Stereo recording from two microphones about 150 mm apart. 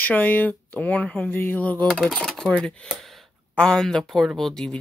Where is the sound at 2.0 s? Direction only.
5° left (ahead or behind).